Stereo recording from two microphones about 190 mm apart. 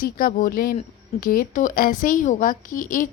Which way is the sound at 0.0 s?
50° left (ahead or behind).